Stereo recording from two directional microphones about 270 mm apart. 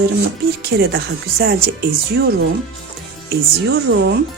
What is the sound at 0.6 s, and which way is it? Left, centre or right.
Speech, right.